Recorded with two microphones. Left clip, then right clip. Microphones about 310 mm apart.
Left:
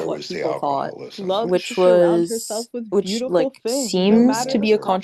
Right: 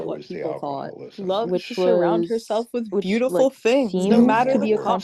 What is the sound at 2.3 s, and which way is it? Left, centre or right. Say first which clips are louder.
Speech: right 3 dB; centre.